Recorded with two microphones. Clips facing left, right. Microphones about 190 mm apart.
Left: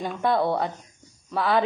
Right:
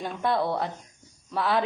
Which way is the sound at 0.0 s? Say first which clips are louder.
Left 3 dB; centre (ahead or behind).